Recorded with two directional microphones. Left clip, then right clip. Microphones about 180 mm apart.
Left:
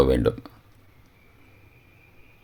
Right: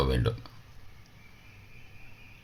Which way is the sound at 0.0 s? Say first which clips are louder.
Left 10 dB; 45° left (ahead or behind).